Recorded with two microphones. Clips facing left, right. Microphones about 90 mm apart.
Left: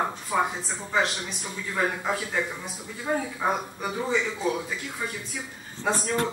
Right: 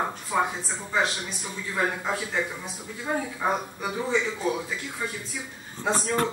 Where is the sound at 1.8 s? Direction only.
Centre (ahead or behind).